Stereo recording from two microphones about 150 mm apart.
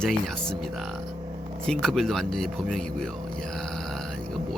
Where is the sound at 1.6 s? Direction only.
5° left (ahead or behind).